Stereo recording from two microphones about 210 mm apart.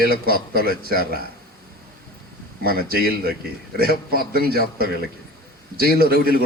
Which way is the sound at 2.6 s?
45° right (ahead or behind).